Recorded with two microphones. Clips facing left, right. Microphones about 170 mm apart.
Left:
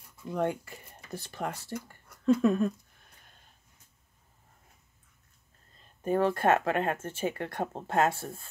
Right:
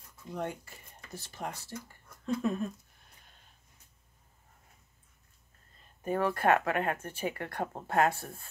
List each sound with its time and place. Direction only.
0.3 s speech: 55° left (ahead or behind)
6.0 s speech: 30° left (ahead or behind)